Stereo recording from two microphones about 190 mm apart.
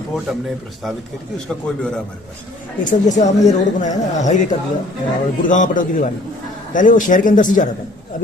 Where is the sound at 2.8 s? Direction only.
40° left (ahead or behind).